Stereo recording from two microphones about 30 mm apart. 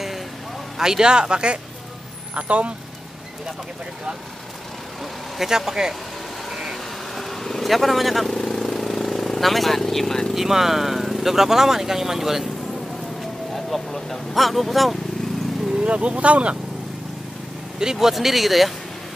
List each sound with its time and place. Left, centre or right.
0.7 s speech: centre
2.3 s speech: right
5.4 s speech: centre
6.5 s vehicle: centre
7.2 s bee: centre
7.6 s vehicle: centre
9.4 s speech: centre
10.3 s speech: centre
13.2 s speech: centre
15.8 s speech: right
17.9 s speech: centre